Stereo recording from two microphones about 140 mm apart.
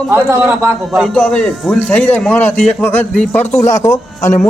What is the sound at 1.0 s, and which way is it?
A man's voice, 5° left (ahead or behind).